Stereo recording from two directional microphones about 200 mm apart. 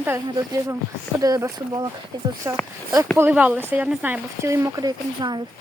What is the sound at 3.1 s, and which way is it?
Speech, 10° right (ahead or behind).